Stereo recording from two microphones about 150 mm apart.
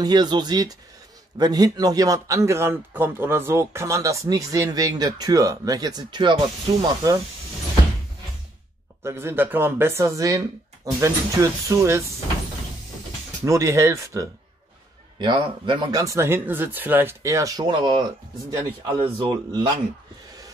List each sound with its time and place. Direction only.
0.0 s a man's voice: 30° right (ahead or behind)
9.0 s a man's voice: 15° right (ahead or behind)
13.4 s a man's voice: 20° right (ahead or behind)
15.1 s a man's voice: 30° right (ahead or behind)